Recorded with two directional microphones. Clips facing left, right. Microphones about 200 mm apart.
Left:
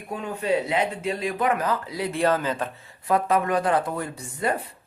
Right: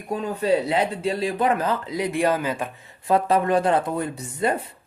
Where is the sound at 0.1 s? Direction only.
35° right (ahead or behind); by 2.6 s 10° right (ahead or behind).